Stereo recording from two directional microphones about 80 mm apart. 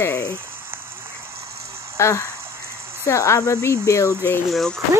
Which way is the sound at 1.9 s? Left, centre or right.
Left.